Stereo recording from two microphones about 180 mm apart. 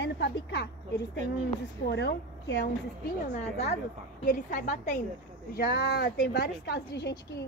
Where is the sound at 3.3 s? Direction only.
35° left (ahead or behind).